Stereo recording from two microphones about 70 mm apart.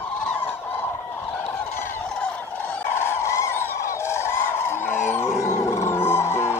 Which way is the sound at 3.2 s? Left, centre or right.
Left.